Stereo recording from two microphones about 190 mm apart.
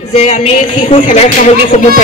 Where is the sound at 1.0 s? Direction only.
40° left (ahead or behind).